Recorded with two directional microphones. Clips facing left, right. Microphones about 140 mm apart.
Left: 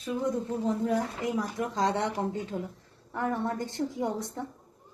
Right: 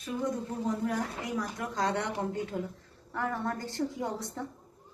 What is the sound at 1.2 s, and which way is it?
Speech, 20° left (ahead or behind).